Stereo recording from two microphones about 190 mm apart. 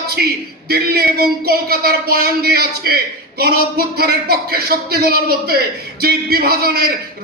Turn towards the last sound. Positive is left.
turn(degrees=-55)  # may be behind; listen again after turning